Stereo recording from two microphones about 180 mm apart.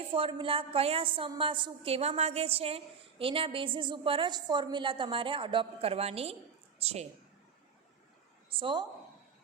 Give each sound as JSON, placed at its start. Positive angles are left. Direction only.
{"t": 0.1, "sound": "a woman's voice", "side_deg": -30}
{"t": 8.4, "sound": "a woman's voice", "side_deg": -30}